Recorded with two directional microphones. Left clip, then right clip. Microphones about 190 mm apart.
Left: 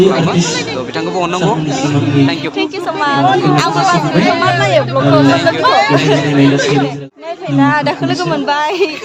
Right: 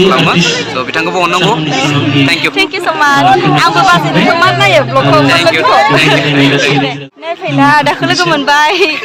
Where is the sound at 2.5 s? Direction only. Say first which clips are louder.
Right 6 dB; 15° right (ahead or behind).